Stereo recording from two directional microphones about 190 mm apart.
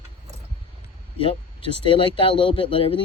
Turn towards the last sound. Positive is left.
turn(degrees=30)  # may be behind; listen again after turning